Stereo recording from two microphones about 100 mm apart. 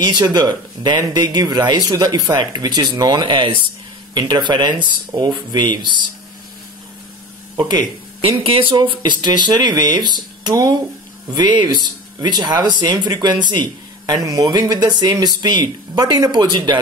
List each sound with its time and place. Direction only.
0.0 s speech: 45° right (ahead or behind)
7.5 s speech: 50° right (ahead or behind)
8.5 s speech: 65° right (ahead or behind); by 16.7 s 45° right (ahead or behind)